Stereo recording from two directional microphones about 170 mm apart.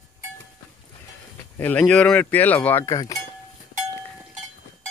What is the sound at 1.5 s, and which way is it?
Speech, 10° left (ahead or behind).